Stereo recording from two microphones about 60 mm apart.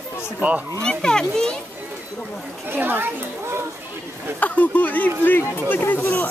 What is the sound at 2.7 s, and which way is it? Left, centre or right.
Speech, right.